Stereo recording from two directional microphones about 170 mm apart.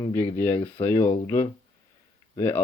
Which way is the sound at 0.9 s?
10° left (ahead or behind).